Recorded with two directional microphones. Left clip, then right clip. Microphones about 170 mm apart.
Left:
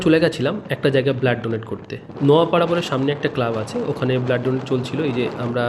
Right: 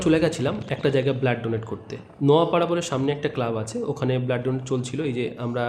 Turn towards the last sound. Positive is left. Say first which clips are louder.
# left 5 dB
turn(degrees=20)  # may be behind; listen again after turning